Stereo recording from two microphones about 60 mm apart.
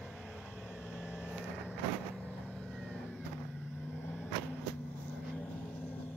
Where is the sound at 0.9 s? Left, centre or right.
Right.